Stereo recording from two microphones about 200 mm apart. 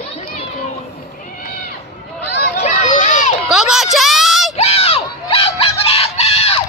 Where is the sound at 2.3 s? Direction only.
40° left (ahead or behind).